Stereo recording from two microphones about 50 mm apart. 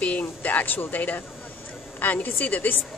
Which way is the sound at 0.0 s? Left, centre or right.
Left.